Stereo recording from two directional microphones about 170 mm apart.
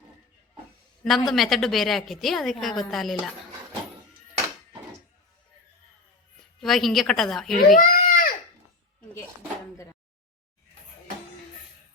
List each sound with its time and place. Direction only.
1.0 s a woman's voice: centre (ahead or behind)
6.6 s a woman's voice: centre (ahead or behind)
7.8 s a sound: 55° left (ahead or behind)